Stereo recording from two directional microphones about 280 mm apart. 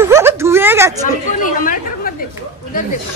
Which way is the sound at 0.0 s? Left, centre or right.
Centre.